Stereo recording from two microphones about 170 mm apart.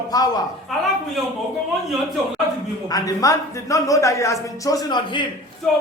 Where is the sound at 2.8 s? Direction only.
20° left (ahead or behind).